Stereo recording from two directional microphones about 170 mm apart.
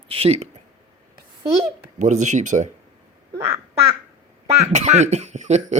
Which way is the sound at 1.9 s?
45° right (ahead or behind).